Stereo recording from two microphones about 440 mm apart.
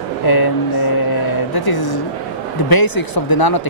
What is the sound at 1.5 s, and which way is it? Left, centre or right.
Speech, left.